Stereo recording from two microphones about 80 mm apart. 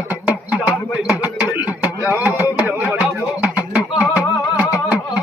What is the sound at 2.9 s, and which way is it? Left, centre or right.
Music, centre.